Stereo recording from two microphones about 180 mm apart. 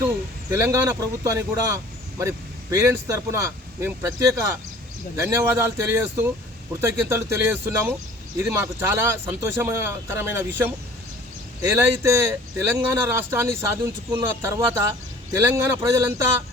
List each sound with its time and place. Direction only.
0.5 s speech: 15° right (ahead or behind)